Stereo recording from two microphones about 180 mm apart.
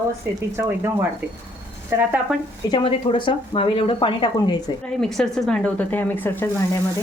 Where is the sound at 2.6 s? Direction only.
25° left (ahead or behind).